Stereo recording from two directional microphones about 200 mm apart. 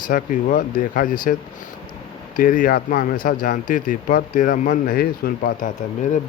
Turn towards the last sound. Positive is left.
turn(degrees=40)  # may be behind; listen again after turning